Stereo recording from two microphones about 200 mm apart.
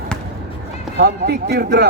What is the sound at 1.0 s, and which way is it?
Speech, 50° right (ahead or behind).